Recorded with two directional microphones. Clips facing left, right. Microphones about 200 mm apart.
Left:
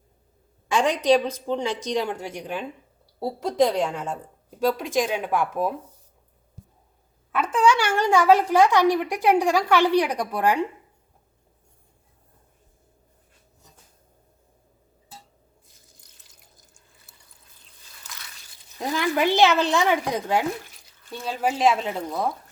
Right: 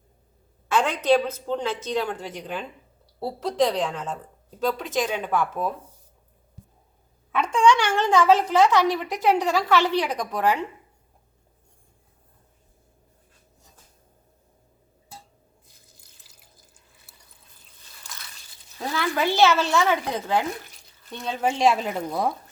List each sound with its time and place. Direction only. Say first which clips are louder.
0.7 s a woman's voice: left 1 dB; 15° left (ahead or behind)
7.3 s a woman's voice: right 1 dB; 5° left (ahead or behind)
18.8 s a woman's voice: left 2 dB; 15° left (ahead or behind)
21.0 s speech: even; 5° left (ahead or behind)